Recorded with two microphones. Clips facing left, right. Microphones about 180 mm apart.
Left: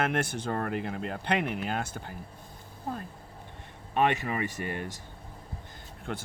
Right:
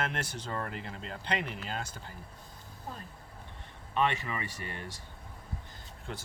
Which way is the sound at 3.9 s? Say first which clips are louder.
Left 4 dB; 50° left (ahead or behind).